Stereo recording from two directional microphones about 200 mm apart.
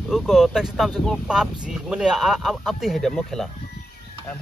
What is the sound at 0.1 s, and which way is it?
Speech, centre (ahead or behind).